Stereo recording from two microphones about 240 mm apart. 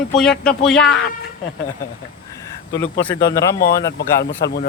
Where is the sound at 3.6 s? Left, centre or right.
Left.